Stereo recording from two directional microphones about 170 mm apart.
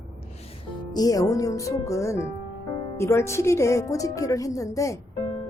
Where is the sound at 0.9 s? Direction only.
20° left (ahead or behind).